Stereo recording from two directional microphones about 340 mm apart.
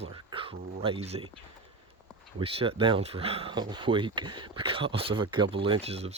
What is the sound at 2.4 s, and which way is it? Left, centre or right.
Speech, centre.